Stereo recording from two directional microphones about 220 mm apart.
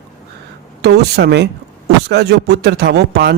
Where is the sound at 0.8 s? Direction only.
50° right (ahead or behind).